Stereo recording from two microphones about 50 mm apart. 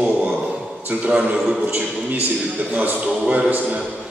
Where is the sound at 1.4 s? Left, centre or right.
Centre.